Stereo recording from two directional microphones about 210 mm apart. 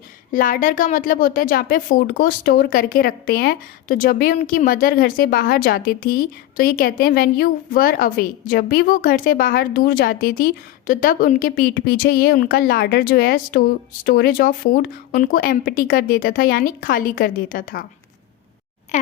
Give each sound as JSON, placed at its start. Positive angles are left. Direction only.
{"t": 0.3, "sound": "a woman's voice", "side_deg": 40}